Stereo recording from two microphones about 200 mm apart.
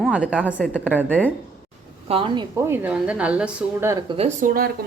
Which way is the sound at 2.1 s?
25° right (ahead or behind).